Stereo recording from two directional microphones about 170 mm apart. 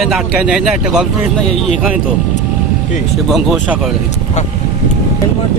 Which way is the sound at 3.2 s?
Centre (ahead or behind).